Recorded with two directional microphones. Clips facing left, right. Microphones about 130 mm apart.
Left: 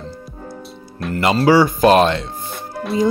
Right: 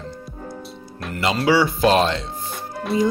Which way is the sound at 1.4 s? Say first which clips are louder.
Left 5 dB; 45° left (ahead or behind).